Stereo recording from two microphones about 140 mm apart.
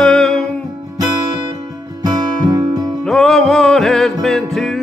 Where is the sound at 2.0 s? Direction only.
25° right (ahead or behind).